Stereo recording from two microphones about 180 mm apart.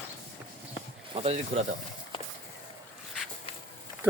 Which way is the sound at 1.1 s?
35° right (ahead or behind).